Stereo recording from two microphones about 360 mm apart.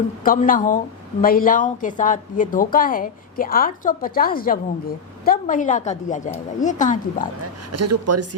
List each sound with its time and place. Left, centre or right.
0.3 s a woman's voice: left
7.7 s a woman's voice: right